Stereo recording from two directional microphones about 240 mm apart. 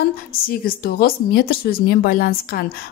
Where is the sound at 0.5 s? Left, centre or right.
Left.